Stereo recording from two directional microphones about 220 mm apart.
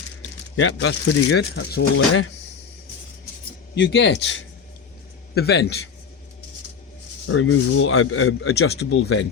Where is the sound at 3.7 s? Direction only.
55° left (ahead or behind).